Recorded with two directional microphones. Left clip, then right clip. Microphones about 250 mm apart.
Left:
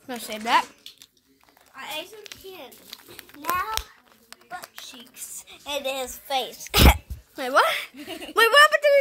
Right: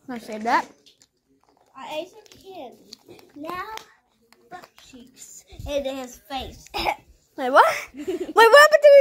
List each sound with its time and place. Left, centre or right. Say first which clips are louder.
0.0 s speech: even; centre
0.5 s speech: even; centre
1.8 s a sound: right 2 dB; left
3.2 s a child's voice: left 6 dB; left
5.1 s a sound: left 4 dB; left
5.9 s a woman's voice: left 3 dB; left
6.7 s speech: left 6 dB; left
7.3 s speech: right 4 dB; centre